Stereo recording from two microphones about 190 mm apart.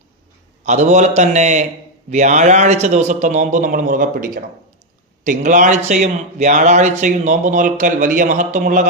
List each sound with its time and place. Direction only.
0.6 s a man's voice: 35° right (ahead or behind)